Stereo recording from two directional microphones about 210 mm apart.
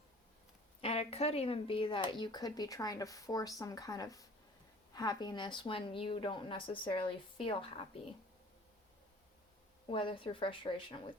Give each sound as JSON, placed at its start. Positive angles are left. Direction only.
{"t": 0.8, "sound": "speech", "side_deg": 30}
{"t": 9.9, "sound": "speech", "side_deg": 25}